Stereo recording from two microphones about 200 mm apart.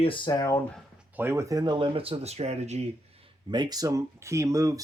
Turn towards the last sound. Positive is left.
turn(degrees=-15)  # may be behind; listen again after turning